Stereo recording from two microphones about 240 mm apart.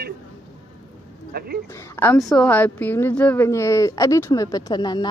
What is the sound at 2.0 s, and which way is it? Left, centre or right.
A woman's voice, centre.